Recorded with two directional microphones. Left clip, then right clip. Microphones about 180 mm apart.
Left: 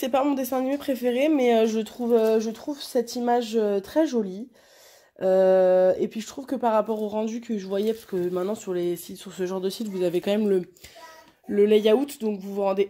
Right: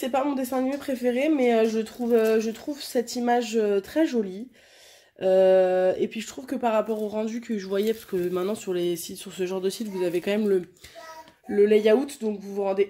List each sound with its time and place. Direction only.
0.0 s speech: 45° left (ahead or behind)
2.0 s speech: 20° left (ahead or behind)
11.5 s speech: 45° left (ahead or behind)